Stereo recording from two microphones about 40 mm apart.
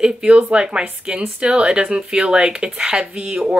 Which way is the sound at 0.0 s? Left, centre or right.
Right.